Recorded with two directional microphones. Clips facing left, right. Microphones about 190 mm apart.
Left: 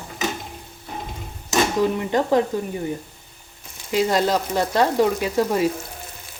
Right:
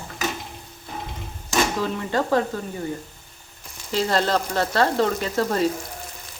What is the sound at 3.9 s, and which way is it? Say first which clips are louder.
Speech: left 2 dB; 10° left (ahead or behind).